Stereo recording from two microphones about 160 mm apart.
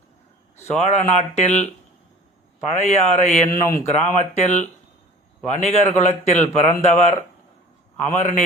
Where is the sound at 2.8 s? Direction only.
45° left (ahead or behind).